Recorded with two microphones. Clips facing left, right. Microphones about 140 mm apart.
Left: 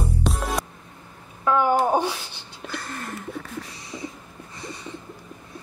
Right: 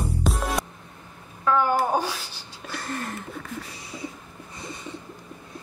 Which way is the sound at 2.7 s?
Centre (ahead or behind).